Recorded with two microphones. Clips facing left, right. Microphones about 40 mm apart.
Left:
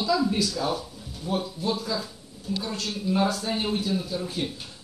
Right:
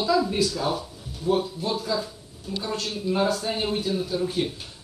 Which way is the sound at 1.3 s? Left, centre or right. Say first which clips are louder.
Right 6 dB; right.